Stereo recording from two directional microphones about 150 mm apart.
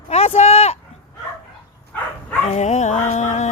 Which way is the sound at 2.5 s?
50° left (ahead or behind).